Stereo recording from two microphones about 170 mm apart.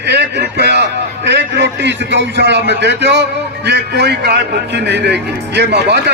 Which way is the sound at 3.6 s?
80° right.